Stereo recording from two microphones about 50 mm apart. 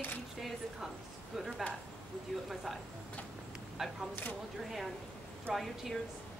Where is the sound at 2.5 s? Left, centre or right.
Centre.